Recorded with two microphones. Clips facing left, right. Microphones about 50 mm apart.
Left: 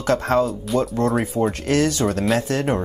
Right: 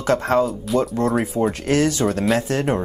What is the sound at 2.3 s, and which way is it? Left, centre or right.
Speech, right.